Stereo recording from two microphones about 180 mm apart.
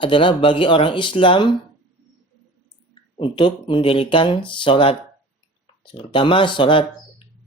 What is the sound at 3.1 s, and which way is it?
Speech, 30° left (ahead or behind).